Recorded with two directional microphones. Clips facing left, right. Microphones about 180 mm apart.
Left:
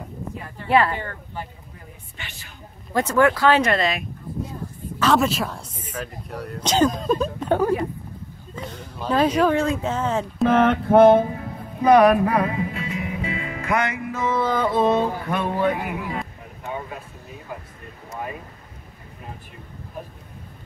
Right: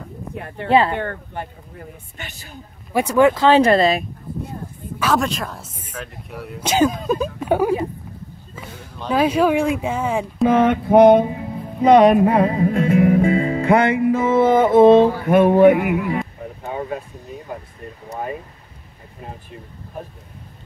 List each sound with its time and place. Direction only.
0.7 s music: 25° right (ahead or behind)
0.9 s speech: 55° right (ahead or behind)
2.1 s a woman's voice: 40° right (ahead or behind)
2.9 s music: 15° right (ahead or behind); by 4.0 s 35° right (ahead or behind)
4.9 s a sound: 10° right (ahead or behind)
5.2 s speech: centre (ahead or behind)
7.3 s a sound: 10° right (ahead or behind)
9.1 s speech: 10° right (ahead or behind)
10.5 s music: 10° right (ahead or behind); by 12.5 s 25° right (ahead or behind)
12.5 s music: 50° right (ahead or behind); by 15.5 s 20° right (ahead or behind)
15.6 s speech: 15° right (ahead or behind)